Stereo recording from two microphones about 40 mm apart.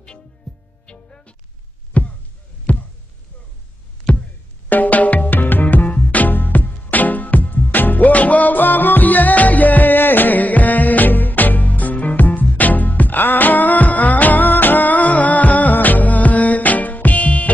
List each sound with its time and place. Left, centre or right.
0.8 s music: left
1.9 s a sound: left
4.1 s music: left
4.6 s music: left
5.9 s music: left